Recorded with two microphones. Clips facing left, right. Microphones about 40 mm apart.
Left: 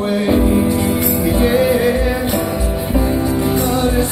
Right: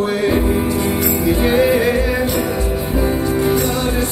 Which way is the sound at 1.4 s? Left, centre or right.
Right.